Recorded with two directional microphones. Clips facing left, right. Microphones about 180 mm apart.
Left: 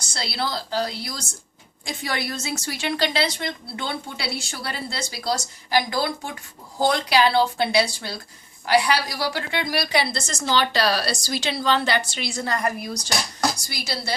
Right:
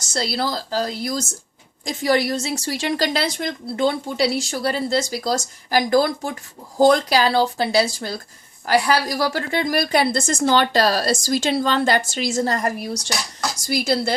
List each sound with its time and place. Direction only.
0.0 s a woman's voice: 40° right (ahead or behind)
13.8 s a woman's voice: 50° right (ahead or behind)